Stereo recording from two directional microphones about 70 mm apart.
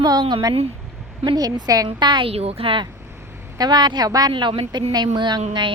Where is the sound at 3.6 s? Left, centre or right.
Right.